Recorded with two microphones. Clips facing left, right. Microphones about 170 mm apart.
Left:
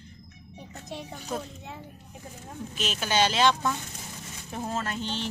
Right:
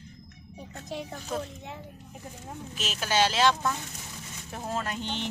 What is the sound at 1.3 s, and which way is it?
Speech, centre (ahead or behind).